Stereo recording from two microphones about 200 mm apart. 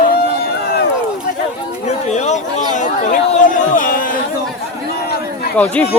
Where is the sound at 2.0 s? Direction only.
35° left (ahead or behind).